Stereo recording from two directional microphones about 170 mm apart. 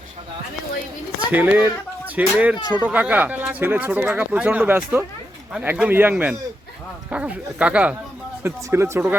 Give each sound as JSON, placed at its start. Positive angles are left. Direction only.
{"t": 1.3, "sound": "speech", "side_deg": -10}
{"t": 2.6, "sound": "speech", "side_deg": -25}
{"t": 2.8, "sound": "speech", "side_deg": -10}